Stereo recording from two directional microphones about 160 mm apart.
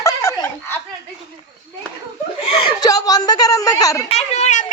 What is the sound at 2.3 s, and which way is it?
Speech, 30° left (ahead or behind).